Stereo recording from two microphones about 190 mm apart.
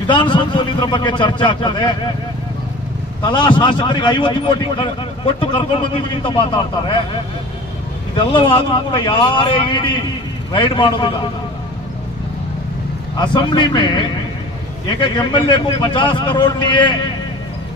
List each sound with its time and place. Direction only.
0.0 s speech: 25° left (ahead or behind)
3.3 s speech: 25° left (ahead or behind)
8.2 s speech: 25° left (ahead or behind)
13.2 s speech: 25° left (ahead or behind)